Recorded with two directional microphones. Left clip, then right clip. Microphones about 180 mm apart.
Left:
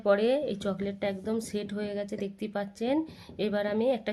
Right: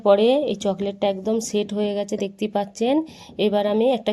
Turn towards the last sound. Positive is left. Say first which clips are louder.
# right 8 dB
turn(degrees=-30)  # may be behind; listen again after turning